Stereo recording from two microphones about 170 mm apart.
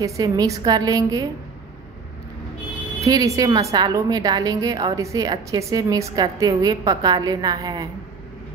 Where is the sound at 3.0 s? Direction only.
20° right (ahead or behind).